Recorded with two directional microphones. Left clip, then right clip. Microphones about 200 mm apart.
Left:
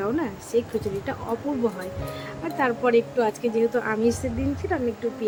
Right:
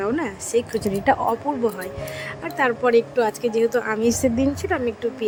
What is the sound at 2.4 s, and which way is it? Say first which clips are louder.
Speech: right 3 dB; 30° right (ahead or behind).